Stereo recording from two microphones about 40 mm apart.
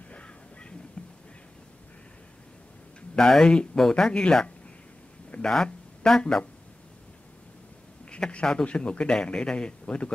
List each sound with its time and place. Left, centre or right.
0.1 s a sound: left
3.2 s a man's voice: centre
8.3 s a man's voice: left